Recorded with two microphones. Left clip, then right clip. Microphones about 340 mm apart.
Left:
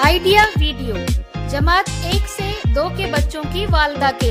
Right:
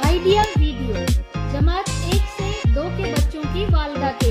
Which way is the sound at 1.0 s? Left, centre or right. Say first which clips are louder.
Even; centre.